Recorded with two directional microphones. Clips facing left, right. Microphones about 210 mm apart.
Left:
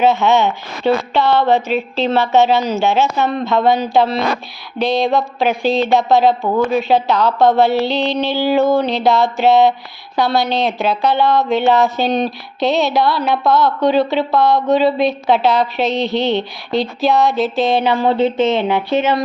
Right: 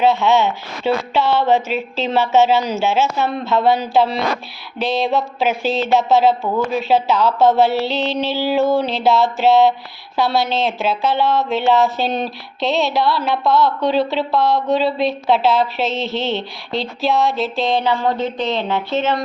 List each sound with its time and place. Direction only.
0.0 s speech: centre (ahead or behind)